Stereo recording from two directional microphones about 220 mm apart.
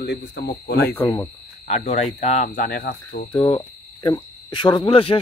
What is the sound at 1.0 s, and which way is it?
Speech, 20° left (ahead or behind).